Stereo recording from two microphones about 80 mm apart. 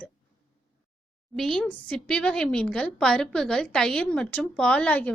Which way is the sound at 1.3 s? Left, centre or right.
Centre.